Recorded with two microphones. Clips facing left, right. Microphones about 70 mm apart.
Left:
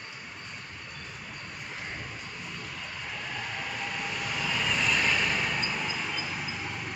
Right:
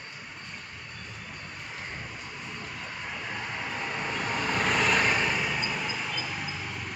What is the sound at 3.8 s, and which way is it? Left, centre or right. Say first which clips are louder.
Vehicle: right 4 dB; right.